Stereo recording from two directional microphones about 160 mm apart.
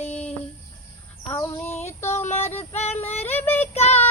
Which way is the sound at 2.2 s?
15° left (ahead or behind).